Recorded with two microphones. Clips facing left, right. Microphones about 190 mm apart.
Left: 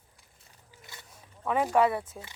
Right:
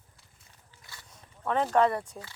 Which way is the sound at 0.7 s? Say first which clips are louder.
Left 3 dB; 20° left (ahead or behind).